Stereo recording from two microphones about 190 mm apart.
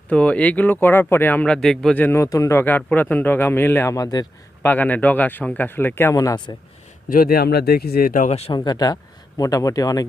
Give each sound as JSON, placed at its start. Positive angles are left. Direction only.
{"t": 0.1, "sound": "a man's voice", "side_deg": 5}
{"t": 4.7, "sound": "a man's voice", "side_deg": 10}
{"t": 7.1, "sound": "speech", "side_deg": 50}